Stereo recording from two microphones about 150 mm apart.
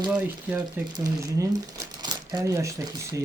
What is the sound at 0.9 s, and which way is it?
Speech, 25° right (ahead or behind).